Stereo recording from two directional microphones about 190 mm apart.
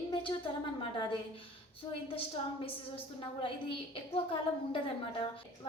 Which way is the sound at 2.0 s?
30° left (ahead or behind).